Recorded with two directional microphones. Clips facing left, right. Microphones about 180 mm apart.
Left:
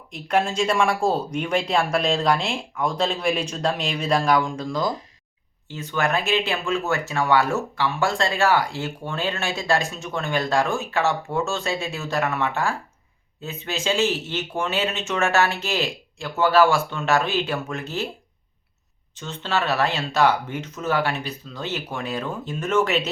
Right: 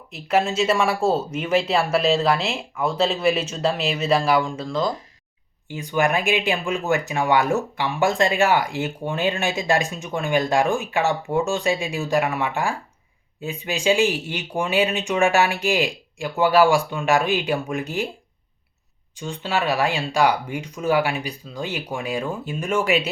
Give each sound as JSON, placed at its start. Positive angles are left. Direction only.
{"t": 0.1, "sound": "speech", "side_deg": -5}
{"t": 5.6, "sound": "speech", "side_deg": -15}
{"t": 19.1, "sound": "speech", "side_deg": -10}